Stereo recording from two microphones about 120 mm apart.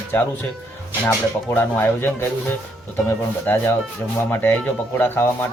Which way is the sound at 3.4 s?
15° left (ahead or behind).